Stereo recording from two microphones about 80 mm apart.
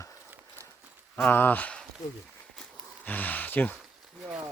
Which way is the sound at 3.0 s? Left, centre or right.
Left.